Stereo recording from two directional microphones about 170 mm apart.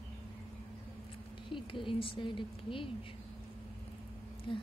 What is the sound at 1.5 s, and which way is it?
Speech, 30° left (ahead or behind).